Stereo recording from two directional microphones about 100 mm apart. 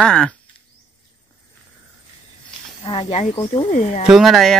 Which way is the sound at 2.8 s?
65° left (ahead or behind).